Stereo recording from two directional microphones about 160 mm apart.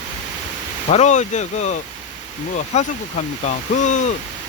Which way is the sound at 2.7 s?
45° left (ahead or behind).